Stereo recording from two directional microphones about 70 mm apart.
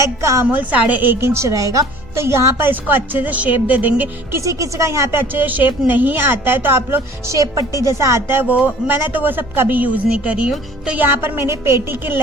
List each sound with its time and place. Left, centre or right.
0.0 s speech: right
0.4 s a woman's voice: right
2.2 s a woman's voice: right
4.4 s speech: right
5.3 s a woman's voice: right
8.4 s a woman's voice: right